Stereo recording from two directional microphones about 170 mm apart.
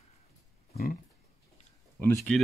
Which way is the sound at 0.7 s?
55° left (ahead or behind).